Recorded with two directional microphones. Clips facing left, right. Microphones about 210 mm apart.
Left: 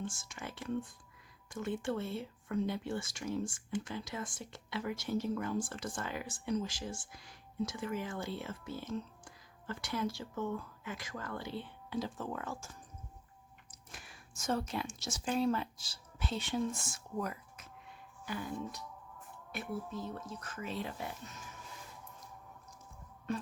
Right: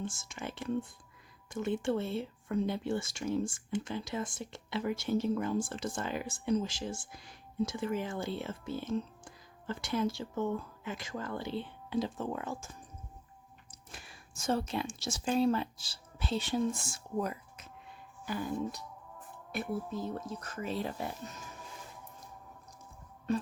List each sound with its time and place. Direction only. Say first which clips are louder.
0.0 s speech: right 3 dB; 20° right (ahead or behind)
13.9 s speech: right 2 dB; 30° right (ahead or behind)
18.3 s speech: right 5 dB; 35° right (ahead or behind)